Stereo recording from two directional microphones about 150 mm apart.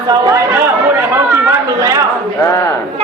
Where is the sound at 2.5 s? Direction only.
20° left (ahead or behind).